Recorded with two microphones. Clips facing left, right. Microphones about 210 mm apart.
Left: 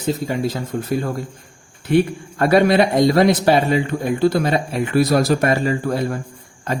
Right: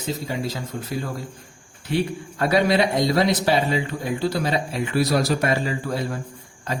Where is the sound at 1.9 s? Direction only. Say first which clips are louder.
Left 7 dB; 55° left (ahead or behind).